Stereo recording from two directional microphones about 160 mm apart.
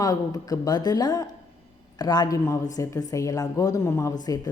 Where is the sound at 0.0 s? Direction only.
20° left (ahead or behind).